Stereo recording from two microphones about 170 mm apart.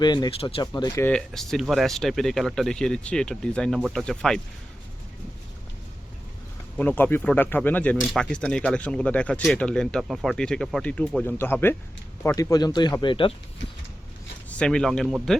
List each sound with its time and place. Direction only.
0.0 s speech: 25° left (ahead or behind)
0.6 s speech: 20° left (ahead or behind)
1.0 s speech: 5° left (ahead or behind)
6.7 s speech: 10° left (ahead or behind); by 13.3 s 30° left (ahead or behind)
14.6 s speech: 5° left (ahead or behind)